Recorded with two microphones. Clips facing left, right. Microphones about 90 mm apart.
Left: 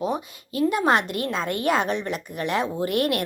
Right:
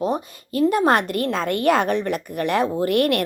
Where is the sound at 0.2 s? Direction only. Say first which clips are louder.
Right 4 dB; 40° right (ahead or behind).